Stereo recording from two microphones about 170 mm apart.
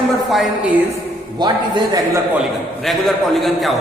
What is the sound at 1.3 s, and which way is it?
Speech, 25° right (ahead or behind).